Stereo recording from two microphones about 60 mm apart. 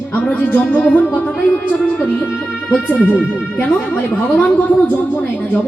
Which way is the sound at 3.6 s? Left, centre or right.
Left.